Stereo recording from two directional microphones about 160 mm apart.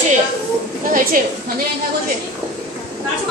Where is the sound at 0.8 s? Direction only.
55° right (ahead or behind).